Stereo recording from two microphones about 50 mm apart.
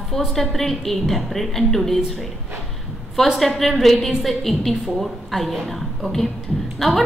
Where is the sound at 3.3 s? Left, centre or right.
Centre.